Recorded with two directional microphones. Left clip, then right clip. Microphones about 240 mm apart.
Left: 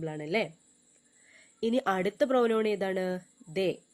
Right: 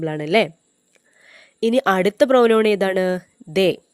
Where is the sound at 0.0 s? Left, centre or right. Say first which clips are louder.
Right 13 dB; right.